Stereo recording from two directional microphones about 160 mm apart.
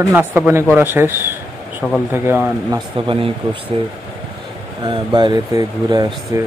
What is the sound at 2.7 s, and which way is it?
Speech, 30° right (ahead or behind).